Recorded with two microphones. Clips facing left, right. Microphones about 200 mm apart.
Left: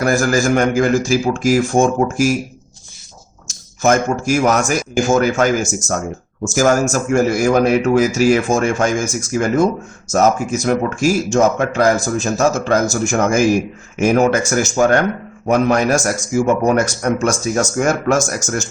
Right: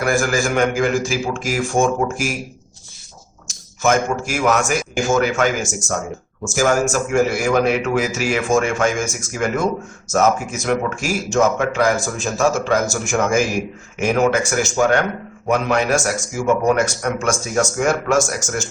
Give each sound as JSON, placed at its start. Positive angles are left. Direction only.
{"t": 0.0, "sound": "speech", "side_deg": 40}
{"t": 3.8, "sound": "a man's voice", "side_deg": 40}